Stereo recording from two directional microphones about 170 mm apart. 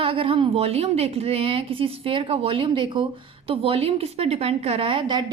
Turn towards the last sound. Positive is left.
turn(degrees=-30)  # may be behind; listen again after turning